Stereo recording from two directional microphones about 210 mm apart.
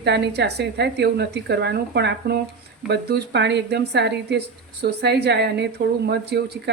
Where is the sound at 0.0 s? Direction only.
55° right (ahead or behind).